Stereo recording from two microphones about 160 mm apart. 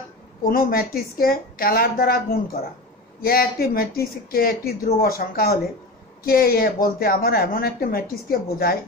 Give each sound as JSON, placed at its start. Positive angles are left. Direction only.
{"t": 0.4, "sound": "a woman's voice", "side_deg": 65}